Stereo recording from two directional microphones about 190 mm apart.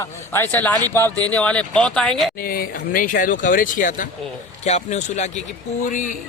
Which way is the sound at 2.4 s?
50° left (ahead or behind).